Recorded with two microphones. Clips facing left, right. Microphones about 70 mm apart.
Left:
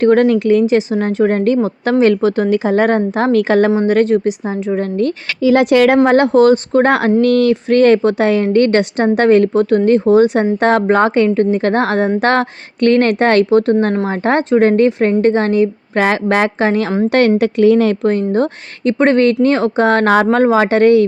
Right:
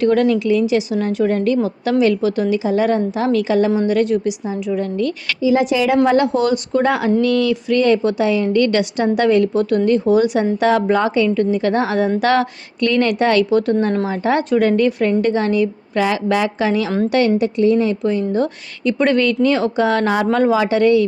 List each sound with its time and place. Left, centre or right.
0.0 s a woman's voice: left
5.4 s a woman's voice: left
6.1 s a woman's voice: left
18.0 s a woman's voice: left